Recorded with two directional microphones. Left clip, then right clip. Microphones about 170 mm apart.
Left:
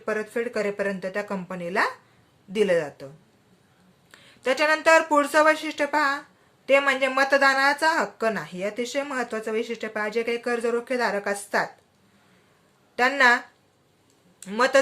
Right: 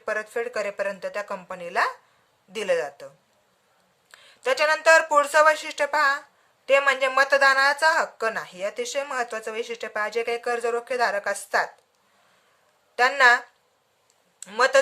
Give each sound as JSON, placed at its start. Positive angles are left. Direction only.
{"t": 0.0, "sound": "speech", "side_deg": -25}
{"t": 4.1, "sound": "speech", "side_deg": -25}
{"t": 13.0, "sound": "speech", "side_deg": -25}